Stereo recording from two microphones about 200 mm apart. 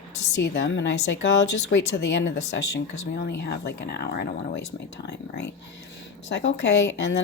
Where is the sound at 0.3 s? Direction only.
60° left (ahead or behind).